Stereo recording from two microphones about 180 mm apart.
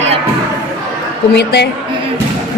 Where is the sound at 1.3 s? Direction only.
70° left (ahead or behind).